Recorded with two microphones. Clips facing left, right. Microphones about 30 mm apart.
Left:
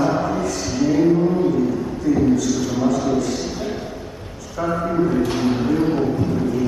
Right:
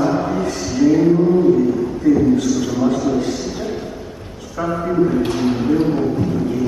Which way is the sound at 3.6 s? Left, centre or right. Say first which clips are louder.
Right 2 dB; centre.